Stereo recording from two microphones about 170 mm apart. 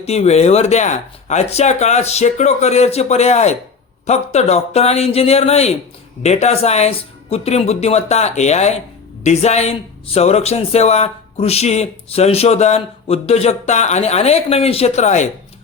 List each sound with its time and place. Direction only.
0.0 s speech: 35° left (ahead or behind)